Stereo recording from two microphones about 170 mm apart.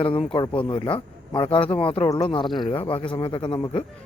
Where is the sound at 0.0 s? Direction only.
30° left (ahead or behind).